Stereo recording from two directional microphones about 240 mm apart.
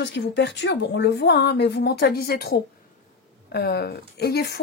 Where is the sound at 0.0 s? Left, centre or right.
Left.